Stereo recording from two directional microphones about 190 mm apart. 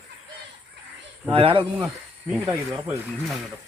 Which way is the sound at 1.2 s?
30° right (ahead or behind).